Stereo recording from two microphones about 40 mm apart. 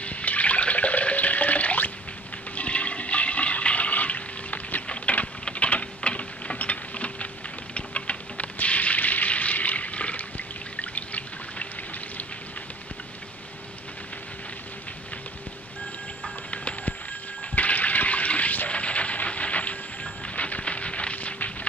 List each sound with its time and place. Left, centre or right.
0.0 s water: left
2.5 s toilet flush: left
5.4 s a sound: left
16.4 s music: left
17.6 s toilet flush: left
18.7 s a sound: left